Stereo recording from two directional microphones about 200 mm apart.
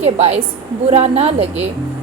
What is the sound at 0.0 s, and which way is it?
Speech, 30° right (ahead or behind).